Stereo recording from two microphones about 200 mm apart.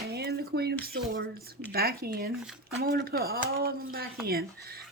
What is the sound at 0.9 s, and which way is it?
Speech, 50° right (ahead or behind).